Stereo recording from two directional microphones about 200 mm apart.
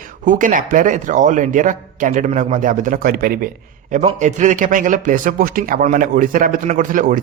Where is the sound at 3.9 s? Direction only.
35° right (ahead or behind).